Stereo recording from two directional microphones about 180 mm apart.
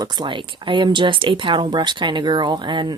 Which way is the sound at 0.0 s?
25° right (ahead or behind).